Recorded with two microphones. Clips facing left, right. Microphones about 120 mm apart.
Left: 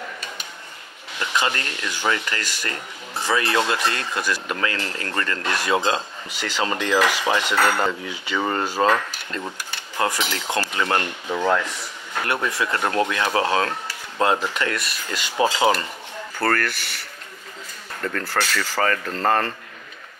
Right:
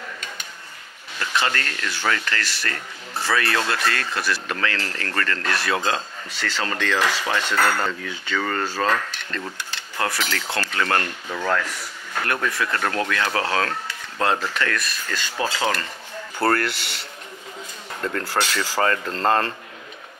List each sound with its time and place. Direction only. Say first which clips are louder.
1.2 s speech: even; 20° left (ahead or behind)
9.9 s cutlery: left 2 dB; 20° left (ahead or behind)
10.7 s speech: right 3 dB; 20° left (ahead or behind)
16.3 s speech: right 2 dB; 30° right (ahead or behind)
18.4 s speech: right 1 dB; 25° right (ahead or behind)